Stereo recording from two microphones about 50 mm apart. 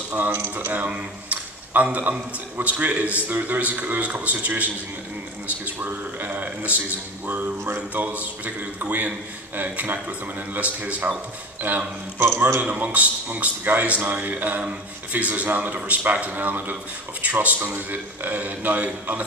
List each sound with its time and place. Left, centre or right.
0.3 s speech: right
0.7 s a man's voice: right
5.8 s a man's voice: right
12.2 s a man's voice: right
12.6 s speech: right